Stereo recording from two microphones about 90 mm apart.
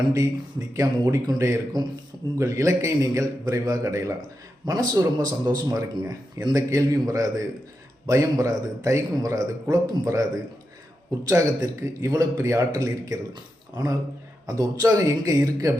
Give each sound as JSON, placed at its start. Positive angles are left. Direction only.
{"t": 0.7, "sound": "a man's voice", "side_deg": -35}
{"t": 11.3, "sound": "a man's voice", "side_deg": -35}